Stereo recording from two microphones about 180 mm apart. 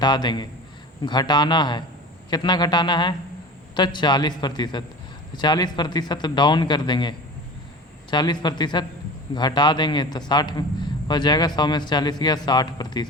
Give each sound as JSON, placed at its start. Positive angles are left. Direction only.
{"t": 0.0, "sound": "a man's voice", "side_deg": 25}